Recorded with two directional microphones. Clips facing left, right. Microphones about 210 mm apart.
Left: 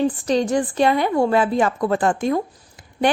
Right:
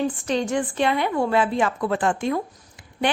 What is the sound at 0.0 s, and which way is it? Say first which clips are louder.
A woman's voice: left 4 dB; 35° left (ahead or behind).